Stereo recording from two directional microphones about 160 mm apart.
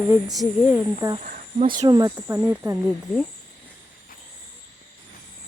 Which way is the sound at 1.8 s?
25° right (ahead or behind).